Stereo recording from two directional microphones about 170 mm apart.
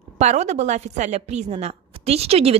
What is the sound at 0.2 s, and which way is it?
A woman's voice, 40° right (ahead or behind).